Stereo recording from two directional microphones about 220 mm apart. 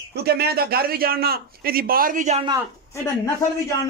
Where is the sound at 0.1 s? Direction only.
45° right (ahead or behind); by 2.5 s 30° right (ahead or behind).